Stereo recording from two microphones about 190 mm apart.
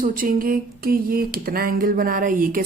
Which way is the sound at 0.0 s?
45° right (ahead or behind).